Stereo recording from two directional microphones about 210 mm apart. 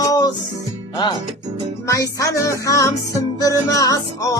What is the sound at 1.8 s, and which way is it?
Music, 15° left (ahead or behind).